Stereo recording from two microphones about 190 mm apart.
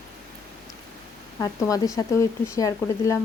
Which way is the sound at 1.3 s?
15° left (ahead or behind).